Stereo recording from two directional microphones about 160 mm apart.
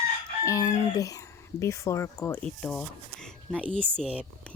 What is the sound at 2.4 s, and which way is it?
Speech, 5° left (ahead or behind).